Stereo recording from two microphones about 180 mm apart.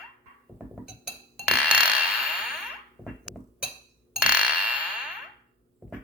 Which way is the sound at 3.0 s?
Centre (ahead or behind).